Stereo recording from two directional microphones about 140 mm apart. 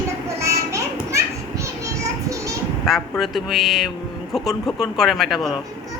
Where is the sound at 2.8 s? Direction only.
Centre (ahead or behind).